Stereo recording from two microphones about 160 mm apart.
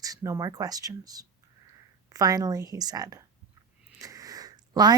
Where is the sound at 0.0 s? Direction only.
20° right (ahead or behind).